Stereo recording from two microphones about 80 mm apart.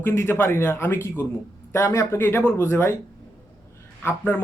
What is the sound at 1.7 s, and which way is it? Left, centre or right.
Speech, left.